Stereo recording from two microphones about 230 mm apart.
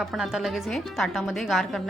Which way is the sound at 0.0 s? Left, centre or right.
Centre.